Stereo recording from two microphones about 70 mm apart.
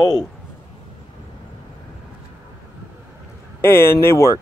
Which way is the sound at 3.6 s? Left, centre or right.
Left.